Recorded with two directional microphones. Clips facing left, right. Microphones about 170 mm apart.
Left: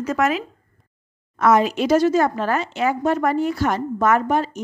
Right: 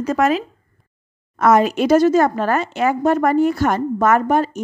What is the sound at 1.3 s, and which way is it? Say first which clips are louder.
Speech: right 2 dB; 45° right (ahead or behind).